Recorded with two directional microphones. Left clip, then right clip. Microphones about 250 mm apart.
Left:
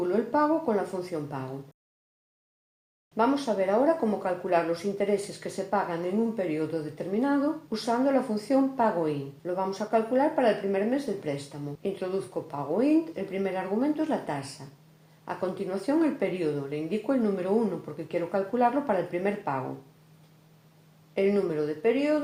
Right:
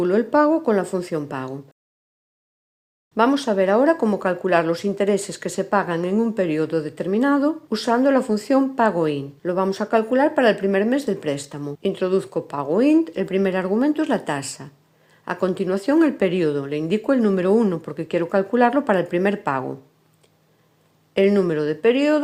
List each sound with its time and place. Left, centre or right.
0.0 s speech: right
3.2 s speech: right
21.1 s speech: right